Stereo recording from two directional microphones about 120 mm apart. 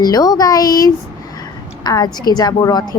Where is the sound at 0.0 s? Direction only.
30° left (ahead or behind).